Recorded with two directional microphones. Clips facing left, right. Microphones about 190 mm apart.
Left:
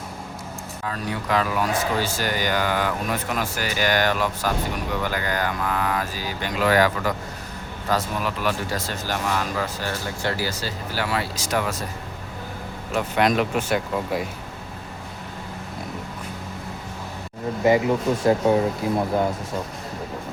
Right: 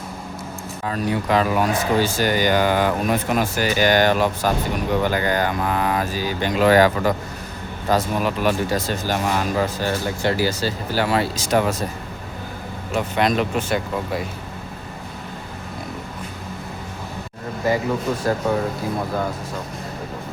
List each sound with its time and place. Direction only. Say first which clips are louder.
0.9 s speech: right 5 dB; 20° right (ahead or behind)
12.9 s speech: right 1 dB; 5° left (ahead or behind)
17.6 s speech: left 2 dB; 20° left (ahead or behind)